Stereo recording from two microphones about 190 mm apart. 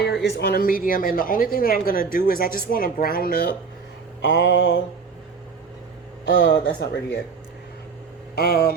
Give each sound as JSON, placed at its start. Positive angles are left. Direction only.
{"t": 0.0, "sound": "speech", "side_deg": 65}
{"t": 4.2, "sound": "mantra", "side_deg": 75}
{"t": 6.3, "sound": "speech", "side_deg": 55}
{"t": 8.4, "sound": "speech", "side_deg": 55}